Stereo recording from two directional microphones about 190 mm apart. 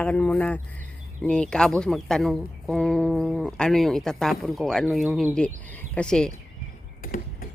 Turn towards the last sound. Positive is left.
turn(degrees=50)  # may be behind; listen again after turning